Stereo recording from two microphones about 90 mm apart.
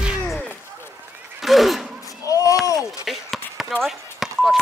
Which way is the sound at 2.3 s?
40° left (ahead or behind).